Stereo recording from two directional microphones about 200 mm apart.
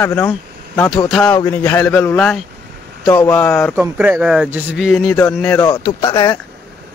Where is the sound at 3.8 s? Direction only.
10° right (ahead or behind).